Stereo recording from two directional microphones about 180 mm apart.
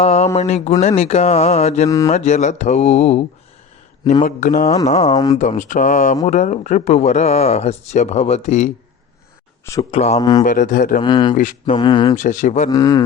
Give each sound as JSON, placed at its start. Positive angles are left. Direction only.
{"t": 0.0, "sound": "speech", "side_deg": 35}
{"t": 5.1, "sound": "speech", "side_deg": 20}
{"t": 5.4, "sound": "speech", "side_deg": 45}
{"t": 9.9, "sound": "speech", "side_deg": 35}
{"t": 10.2, "sound": "speech", "side_deg": 20}
{"t": 10.4, "sound": "speech", "side_deg": 45}
{"t": 11.0, "sound": "speech", "side_deg": 25}
{"t": 12.1, "sound": "speech", "side_deg": 45}
{"t": 12.7, "sound": "speech", "side_deg": 20}